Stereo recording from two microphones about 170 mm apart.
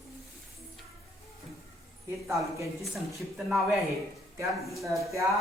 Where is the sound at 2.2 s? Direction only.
15° right (ahead or behind).